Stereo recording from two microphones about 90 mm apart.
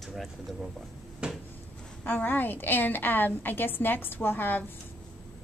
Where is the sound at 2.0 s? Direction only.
20° left (ahead or behind).